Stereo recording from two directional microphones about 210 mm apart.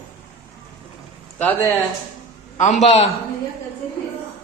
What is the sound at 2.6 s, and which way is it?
Speech, 30° left (ahead or behind).